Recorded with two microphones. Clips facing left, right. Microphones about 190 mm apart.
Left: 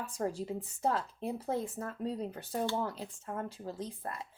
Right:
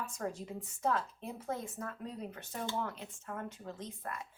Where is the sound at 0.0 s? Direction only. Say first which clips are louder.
Left 4 dB; 30° left (ahead or behind).